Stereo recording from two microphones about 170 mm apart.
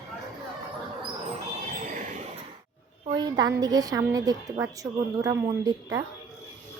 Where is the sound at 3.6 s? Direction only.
20° right (ahead or behind).